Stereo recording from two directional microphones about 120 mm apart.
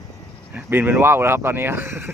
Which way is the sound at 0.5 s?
20° right (ahead or behind).